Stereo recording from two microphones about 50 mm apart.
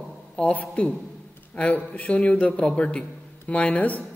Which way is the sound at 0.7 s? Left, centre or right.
Left.